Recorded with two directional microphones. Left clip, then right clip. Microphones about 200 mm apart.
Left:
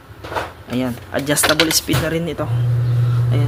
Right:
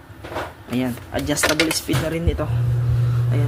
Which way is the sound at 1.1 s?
20° left (ahead or behind).